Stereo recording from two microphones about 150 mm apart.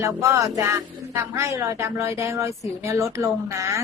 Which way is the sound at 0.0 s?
20° right (ahead or behind).